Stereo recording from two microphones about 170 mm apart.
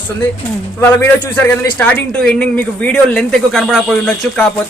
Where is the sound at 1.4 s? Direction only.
10° left (ahead or behind).